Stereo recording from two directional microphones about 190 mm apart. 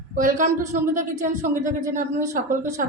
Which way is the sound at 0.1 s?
45° right (ahead or behind).